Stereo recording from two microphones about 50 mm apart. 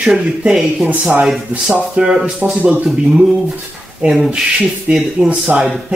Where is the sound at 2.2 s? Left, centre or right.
Right.